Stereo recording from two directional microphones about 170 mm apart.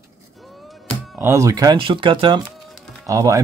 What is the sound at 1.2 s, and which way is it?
Speech, 15° right (ahead or behind).